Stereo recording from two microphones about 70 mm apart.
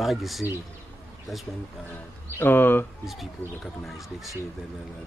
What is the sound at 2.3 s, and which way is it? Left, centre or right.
Speech, left.